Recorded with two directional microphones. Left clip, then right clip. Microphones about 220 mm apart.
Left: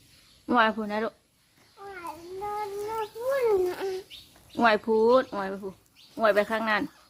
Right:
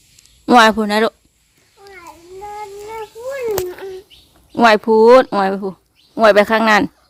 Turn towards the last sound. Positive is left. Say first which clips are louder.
# right 14 dB
turn(degrees=-50)  # may be behind; listen again after turning